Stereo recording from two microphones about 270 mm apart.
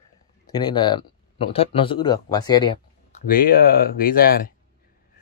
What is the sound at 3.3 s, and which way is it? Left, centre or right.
Speech, left.